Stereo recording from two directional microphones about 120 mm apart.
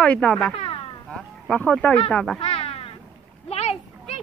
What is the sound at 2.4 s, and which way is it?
Meow, 55° left (ahead or behind).